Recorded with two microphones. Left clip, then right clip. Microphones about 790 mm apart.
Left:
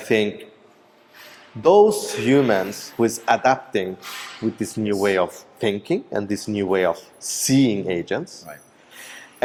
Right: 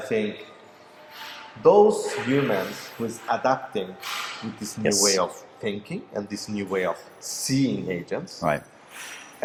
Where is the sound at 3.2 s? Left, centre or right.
Left.